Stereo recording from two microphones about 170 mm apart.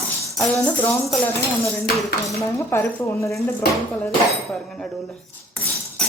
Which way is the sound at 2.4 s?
15° left (ahead or behind).